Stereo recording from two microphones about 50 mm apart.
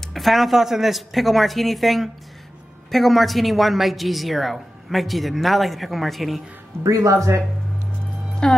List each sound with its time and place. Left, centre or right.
0.0 s a woman's voice: centre
6.8 s speech: right
8.4 s speech: centre